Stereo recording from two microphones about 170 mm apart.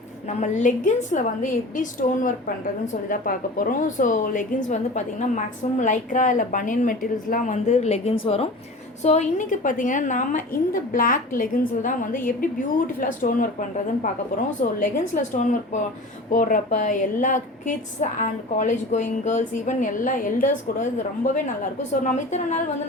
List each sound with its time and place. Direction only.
0.3 s a woman's voice: 45° left (ahead or behind)
13.0 s a woman's voice: 50° left (ahead or behind)